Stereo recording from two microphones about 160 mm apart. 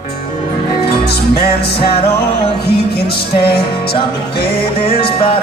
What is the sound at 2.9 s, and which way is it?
Music, 80° left.